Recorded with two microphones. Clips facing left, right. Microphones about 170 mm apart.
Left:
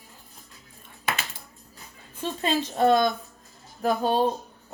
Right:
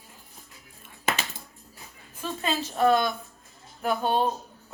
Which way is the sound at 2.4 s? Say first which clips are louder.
Left 1 dB; 35° left (ahead or behind).